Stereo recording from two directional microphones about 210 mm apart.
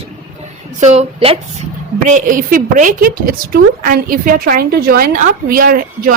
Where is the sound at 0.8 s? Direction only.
30° right (ahead or behind).